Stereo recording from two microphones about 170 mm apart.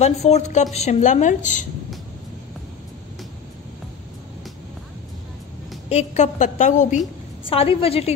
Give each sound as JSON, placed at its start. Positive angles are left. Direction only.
{"t": 0.0, "sound": "a woman's voice", "side_deg": 40}
{"t": 5.9, "sound": "a woman's voice", "side_deg": 40}
{"t": 7.4, "sound": "a woman's voice", "side_deg": 35}